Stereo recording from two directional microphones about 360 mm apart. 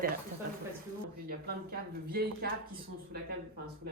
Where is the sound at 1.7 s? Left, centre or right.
Right.